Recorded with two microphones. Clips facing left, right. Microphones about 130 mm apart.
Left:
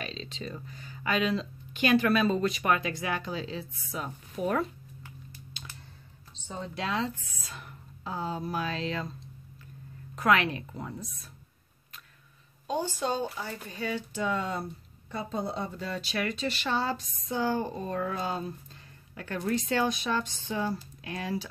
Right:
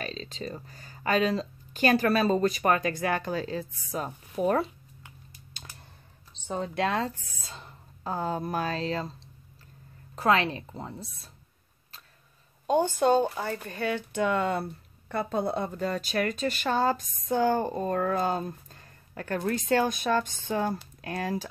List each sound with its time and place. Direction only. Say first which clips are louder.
0.0 s speech: right 2 dB; 40° right (ahead or behind)
6.4 s speech: right 6 dB; 55° right (ahead or behind)
7.4 s speech: even; 25° right (ahead or behind)
8.0 s speech: right 3 dB; 50° right (ahead or behind)
10.1 s speech: right 1 dB; 30° right (ahead or behind)
12.6 s speech: right 7 dB; 55° right (ahead or behind)